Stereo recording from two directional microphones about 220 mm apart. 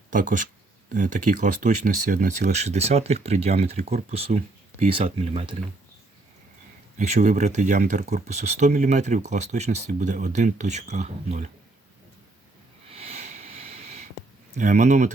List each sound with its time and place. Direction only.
0.1 s speech: 35° right (ahead or behind)
6.9 s speech: 35° right (ahead or behind)
12.9 s sniff: 30° right (ahead or behind)
14.5 s speech: 35° right (ahead or behind)